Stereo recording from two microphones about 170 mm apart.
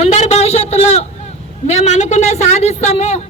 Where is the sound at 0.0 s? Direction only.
40° left (ahead or behind).